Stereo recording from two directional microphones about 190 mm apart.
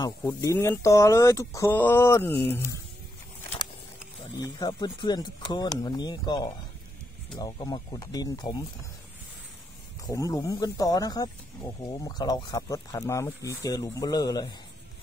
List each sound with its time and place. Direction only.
0.4 s speech: 15° left (ahead or behind)
4.4 s speech: 20° left (ahead or behind)
10.0 s speech: 20° left (ahead or behind)